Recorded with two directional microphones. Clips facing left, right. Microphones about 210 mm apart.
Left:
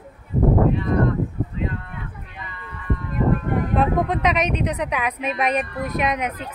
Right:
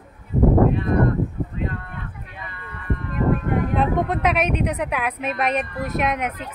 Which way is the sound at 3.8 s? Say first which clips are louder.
Left 2 dB; 5° right (ahead or behind).